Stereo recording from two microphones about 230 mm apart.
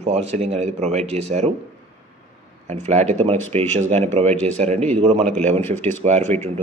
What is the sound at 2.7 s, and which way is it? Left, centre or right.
A man's voice, right.